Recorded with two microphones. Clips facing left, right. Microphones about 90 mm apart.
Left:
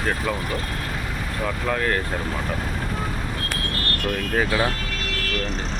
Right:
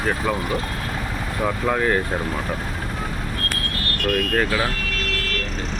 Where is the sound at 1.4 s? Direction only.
15° right (ahead or behind).